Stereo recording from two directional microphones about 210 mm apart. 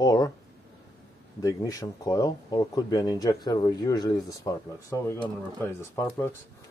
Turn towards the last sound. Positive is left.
turn(degrees=10)  # may be behind; listen again after turning